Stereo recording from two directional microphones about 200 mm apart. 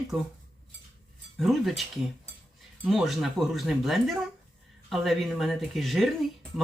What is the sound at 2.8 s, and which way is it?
Speech, centre (ahead or behind).